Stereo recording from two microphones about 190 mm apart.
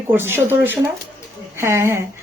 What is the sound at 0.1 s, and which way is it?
Speech, 10° right (ahead or behind).